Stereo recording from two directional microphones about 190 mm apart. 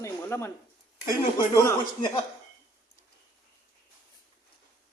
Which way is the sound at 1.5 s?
20° left (ahead or behind).